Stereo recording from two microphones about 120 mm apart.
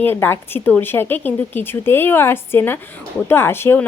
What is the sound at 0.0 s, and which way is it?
A woman's voice, 20° left (ahead or behind).